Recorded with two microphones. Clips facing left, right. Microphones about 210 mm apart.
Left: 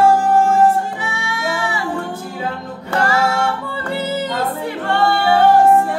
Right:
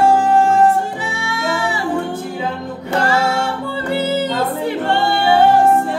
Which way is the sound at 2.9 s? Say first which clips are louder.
Right 1 dB; 25° right (ahead or behind).